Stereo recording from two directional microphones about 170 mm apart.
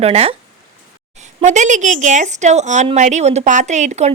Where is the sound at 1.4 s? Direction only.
45° right (ahead or behind).